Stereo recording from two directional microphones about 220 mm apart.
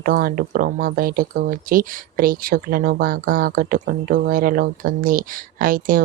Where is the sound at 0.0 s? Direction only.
40° right (ahead or behind).